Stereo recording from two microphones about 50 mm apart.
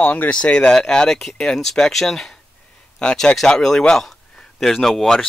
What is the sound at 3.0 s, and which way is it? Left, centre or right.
Speech, centre.